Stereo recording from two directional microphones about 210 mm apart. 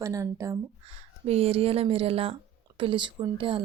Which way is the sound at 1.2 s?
30° right (ahead or behind).